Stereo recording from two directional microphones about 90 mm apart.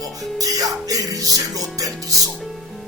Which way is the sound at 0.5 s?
40° right (ahead or behind).